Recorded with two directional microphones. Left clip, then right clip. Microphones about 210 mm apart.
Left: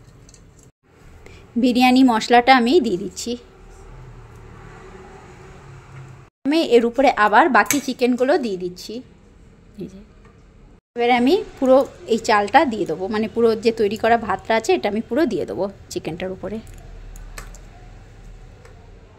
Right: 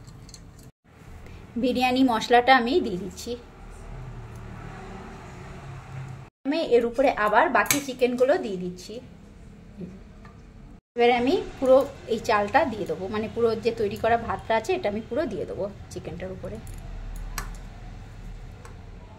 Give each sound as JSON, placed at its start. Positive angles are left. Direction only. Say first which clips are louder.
{"t": 1.6, "sound": "a woman's voice", "louder": "left 7 dB", "side_deg": 40}
{"t": 6.5, "sound": "speech", "louder": "left 6 dB", "side_deg": 40}
{"t": 11.1, "sound": "a woman's voice", "louder": "left 6 dB", "side_deg": 40}